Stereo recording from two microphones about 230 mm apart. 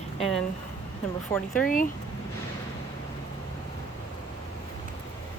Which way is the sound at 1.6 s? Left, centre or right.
Left.